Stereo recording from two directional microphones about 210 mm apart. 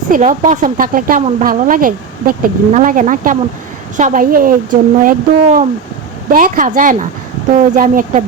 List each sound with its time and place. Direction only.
0.1 s speech: 35° right (ahead or behind)